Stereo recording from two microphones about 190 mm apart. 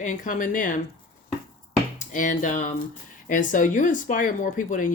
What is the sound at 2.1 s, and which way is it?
Speech, 45° left (ahead or behind).